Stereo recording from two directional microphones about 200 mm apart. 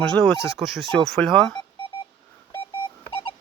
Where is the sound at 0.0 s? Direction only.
5° left (ahead or behind).